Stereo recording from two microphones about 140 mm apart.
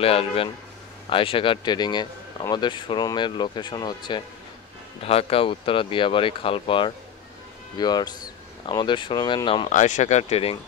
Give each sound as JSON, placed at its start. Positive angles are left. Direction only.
{"t": 0.0, "sound": "speech", "side_deg": 40}
{"t": 5.0, "sound": "speech", "side_deg": 45}
{"t": 9.7, "sound": "speech", "side_deg": 60}